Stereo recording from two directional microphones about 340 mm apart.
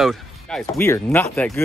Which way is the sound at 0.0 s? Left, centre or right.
Centre.